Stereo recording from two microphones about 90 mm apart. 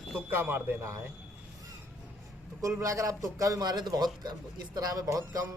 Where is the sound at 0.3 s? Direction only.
25° right (ahead or behind).